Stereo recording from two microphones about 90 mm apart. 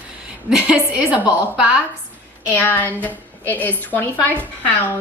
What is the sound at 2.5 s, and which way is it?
A woman's voice, 20° left (ahead or behind).